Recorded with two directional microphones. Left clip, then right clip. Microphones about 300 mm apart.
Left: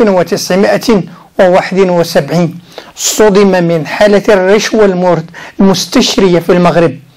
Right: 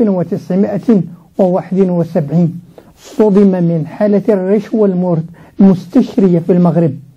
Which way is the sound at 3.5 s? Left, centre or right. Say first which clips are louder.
Left 7 dB; centre.